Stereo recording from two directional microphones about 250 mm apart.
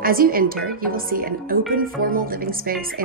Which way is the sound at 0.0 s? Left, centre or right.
Right.